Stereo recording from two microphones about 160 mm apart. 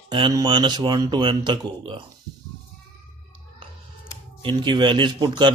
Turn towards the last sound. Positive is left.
turn(degrees=-30)  # may be behind; listen again after turning